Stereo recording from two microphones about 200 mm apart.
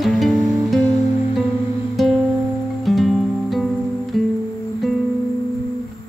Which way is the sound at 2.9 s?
Centre (ahead or behind).